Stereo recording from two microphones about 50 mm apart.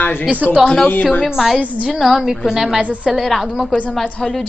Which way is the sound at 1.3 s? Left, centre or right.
Centre.